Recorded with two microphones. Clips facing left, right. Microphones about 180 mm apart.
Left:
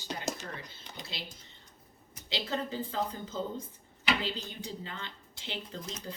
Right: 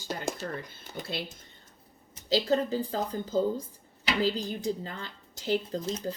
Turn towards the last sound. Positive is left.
turn(degrees=-30)  # may be behind; listen again after turning